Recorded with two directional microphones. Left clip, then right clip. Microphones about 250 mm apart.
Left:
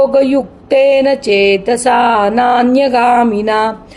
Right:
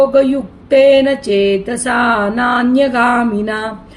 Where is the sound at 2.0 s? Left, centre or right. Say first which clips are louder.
Left 4 dB; centre.